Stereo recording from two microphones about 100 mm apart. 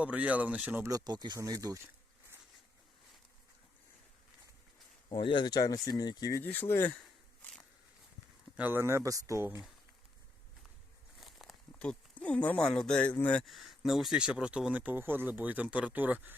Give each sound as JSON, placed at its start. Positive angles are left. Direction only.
{"t": 0.0, "sound": "speech", "side_deg": -15}
{"t": 0.8, "sound": "speech", "side_deg": -35}
{"t": 5.0, "sound": "speech", "side_deg": 55}
{"t": 6.4, "sound": "speech", "side_deg": 20}
{"t": 8.5, "sound": "speech", "side_deg": -20}
{"t": 11.2, "sound": "a sound", "side_deg": 0}
{"t": 11.8, "sound": "speech", "side_deg": 10}